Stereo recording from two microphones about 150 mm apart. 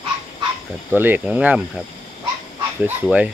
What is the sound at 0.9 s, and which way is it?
Speech, 15° right (ahead or behind).